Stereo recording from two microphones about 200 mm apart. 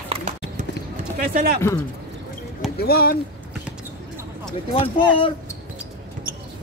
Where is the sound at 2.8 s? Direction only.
50° left (ahead or behind).